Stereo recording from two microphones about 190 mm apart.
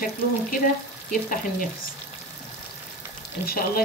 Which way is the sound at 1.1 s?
45° left (ahead or behind).